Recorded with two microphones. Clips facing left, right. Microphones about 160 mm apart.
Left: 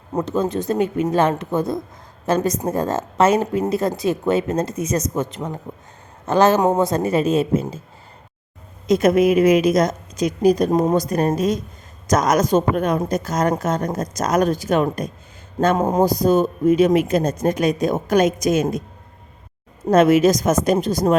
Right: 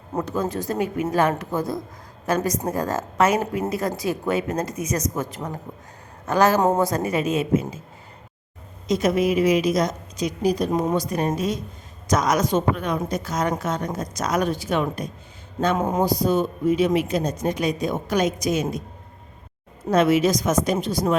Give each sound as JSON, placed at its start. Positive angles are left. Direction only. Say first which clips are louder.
{"t": 0.3, "sound": "a woman's voice", "louder": "left 6 dB", "side_deg": 20}
{"t": 8.9, "sound": "a man's voice", "louder": "left 5 dB", "side_deg": 50}
{"t": 19.9, "sound": "a man's voice", "louder": "left 5 dB", "side_deg": 45}